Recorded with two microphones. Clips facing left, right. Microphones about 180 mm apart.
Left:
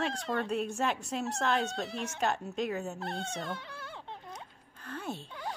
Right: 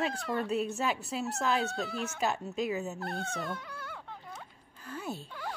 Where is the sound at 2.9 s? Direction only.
25° left (ahead or behind).